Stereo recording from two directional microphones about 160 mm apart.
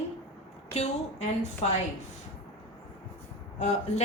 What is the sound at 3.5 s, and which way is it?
Speech, 45° left (ahead or behind).